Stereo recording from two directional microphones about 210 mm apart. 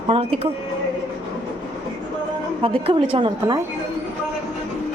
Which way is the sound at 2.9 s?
25° right (ahead or behind).